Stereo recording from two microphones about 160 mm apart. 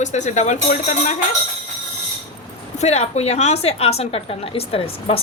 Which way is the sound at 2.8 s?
40° left (ahead or behind).